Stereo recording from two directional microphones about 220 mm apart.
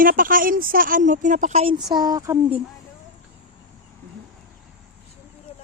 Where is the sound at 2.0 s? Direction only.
15° right (ahead or behind).